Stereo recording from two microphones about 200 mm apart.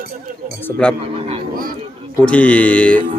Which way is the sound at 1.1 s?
30° right (ahead or behind).